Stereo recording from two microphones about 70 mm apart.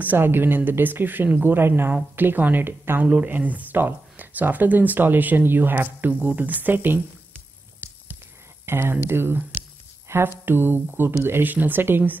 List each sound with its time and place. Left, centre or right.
0.0 s speech: right
8.6 s speech: right
10.0 s a sound: right
10.4 s speech: right